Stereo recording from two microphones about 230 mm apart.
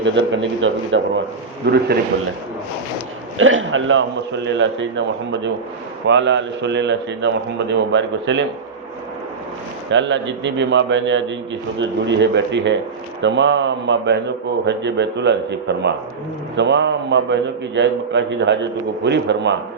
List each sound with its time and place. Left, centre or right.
0.0 s a man's voice: right
3.3 s a man's voice: right
9.9 s a man's voice: right